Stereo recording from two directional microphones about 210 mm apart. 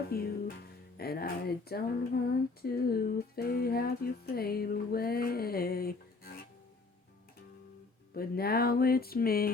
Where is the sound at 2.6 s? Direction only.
45° left (ahead or behind).